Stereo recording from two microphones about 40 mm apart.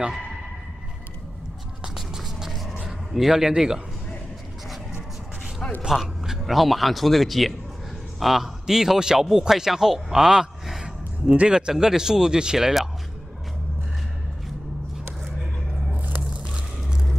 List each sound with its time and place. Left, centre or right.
2.0 s a sound: centre
3.1 s a man's voice: centre
5.9 s a man's voice: centre
11.2 s a man's voice: right
16.4 s music: right